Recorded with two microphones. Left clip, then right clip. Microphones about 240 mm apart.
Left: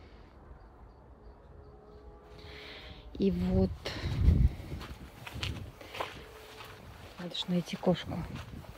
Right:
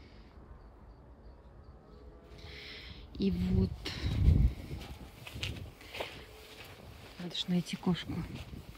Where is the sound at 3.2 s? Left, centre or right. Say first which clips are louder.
Left 5 dB; centre.